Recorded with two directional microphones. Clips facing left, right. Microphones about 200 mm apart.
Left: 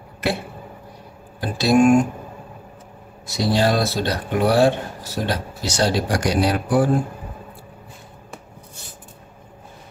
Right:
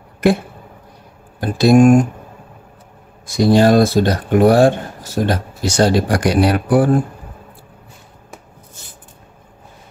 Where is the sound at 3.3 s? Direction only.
50° right (ahead or behind).